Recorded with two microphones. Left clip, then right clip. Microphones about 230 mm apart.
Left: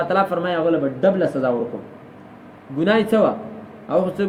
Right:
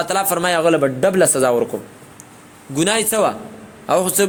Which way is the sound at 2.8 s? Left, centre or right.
Right.